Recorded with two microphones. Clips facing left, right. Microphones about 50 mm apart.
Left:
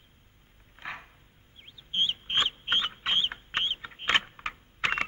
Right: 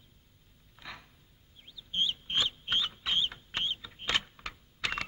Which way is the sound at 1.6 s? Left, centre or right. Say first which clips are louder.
Left 3 dB; left.